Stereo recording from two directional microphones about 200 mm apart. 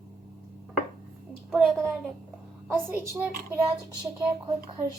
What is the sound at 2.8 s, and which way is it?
Speech, 10° right (ahead or behind).